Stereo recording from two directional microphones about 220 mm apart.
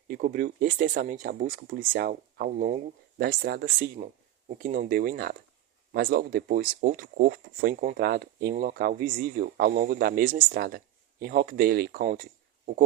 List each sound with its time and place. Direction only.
0.1 s speech: 35° right (ahead or behind)